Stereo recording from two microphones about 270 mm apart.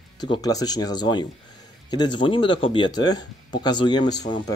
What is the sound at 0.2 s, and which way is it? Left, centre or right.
Speech, centre.